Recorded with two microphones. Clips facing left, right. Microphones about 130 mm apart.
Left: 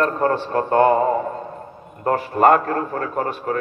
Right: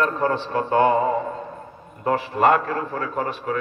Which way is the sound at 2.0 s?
50° left (ahead or behind).